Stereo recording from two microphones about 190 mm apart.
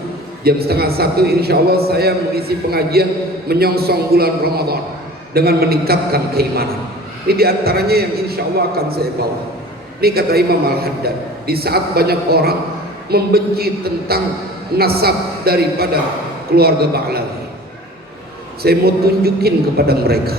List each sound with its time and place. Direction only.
0.4 s a man's voice: 55° right (ahead or behind)
18.6 s a man's voice: 55° right (ahead or behind)